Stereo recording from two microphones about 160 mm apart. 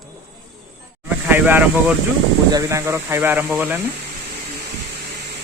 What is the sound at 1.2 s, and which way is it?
Speech, 10° right (ahead or behind).